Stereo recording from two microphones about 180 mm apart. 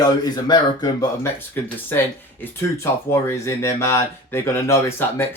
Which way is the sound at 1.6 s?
10° left (ahead or behind).